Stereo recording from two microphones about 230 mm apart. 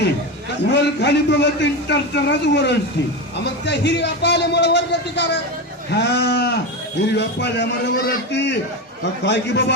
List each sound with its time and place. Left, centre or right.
0.7 s a man's voice: left